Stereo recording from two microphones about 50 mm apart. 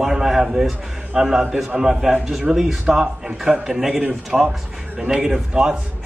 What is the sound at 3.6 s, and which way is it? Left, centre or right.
A man's voice, centre.